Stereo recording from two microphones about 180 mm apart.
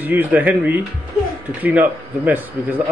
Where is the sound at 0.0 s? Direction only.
10° right (ahead or behind).